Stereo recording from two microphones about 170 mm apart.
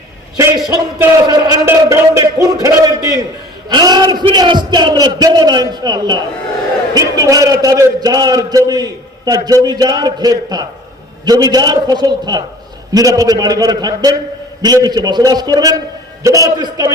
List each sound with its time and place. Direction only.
0.7 s a man's voice: 20° right (ahead or behind)